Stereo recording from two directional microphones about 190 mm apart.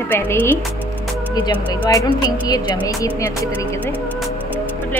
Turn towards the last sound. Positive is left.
turn(degrees=20)  # may be behind; listen again after turning